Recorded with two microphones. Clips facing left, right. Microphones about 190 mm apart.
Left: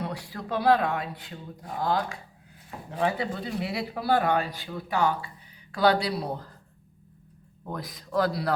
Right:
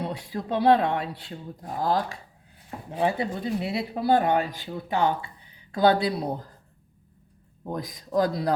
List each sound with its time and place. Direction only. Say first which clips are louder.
0.0 s speech: right 3 dB; 20° right (ahead or behind); by 2.1 s 40° right (ahead or behind)
2.9 s speech: right 2 dB; 20° right (ahead or behind)
7.7 s speech: right 3 dB; 20° right (ahead or behind)